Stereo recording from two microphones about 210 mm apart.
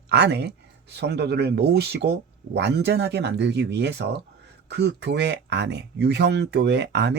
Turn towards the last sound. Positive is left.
turn(degrees=-55)  # may be behind; listen again after turning